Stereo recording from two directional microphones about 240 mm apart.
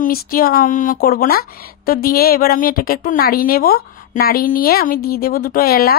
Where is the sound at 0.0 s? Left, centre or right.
Left.